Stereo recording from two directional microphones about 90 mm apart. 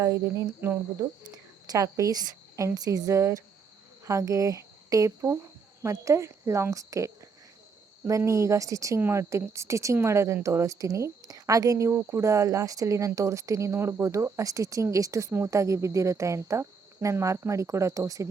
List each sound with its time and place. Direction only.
0.0 s speech: 35° right (ahead or behind)